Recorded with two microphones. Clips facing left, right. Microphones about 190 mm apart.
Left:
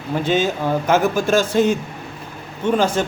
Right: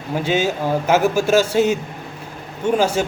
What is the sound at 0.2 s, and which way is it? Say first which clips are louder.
A man's voice: even; 10° right (ahead or behind).